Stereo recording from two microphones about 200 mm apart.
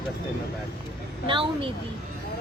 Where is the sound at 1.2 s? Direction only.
25° right (ahead or behind).